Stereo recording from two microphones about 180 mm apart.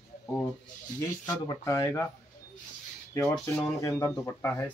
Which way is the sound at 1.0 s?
20° left (ahead or behind).